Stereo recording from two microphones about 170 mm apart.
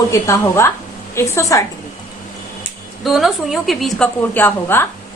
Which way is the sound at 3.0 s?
Centre (ahead or behind).